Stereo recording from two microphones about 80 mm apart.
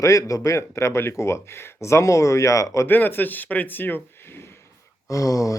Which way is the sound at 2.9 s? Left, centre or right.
Left.